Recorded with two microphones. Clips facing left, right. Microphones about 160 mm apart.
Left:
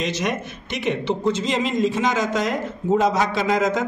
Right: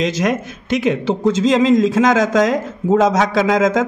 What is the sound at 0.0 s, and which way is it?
A man's voice, 90° right.